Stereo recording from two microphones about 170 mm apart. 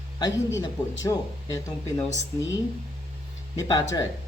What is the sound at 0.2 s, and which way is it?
A woman's voice, 20° left (ahead or behind).